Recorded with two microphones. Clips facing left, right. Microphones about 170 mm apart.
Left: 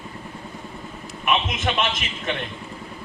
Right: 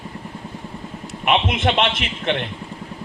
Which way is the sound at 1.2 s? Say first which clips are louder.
Right 4 dB; 60° right (ahead or behind).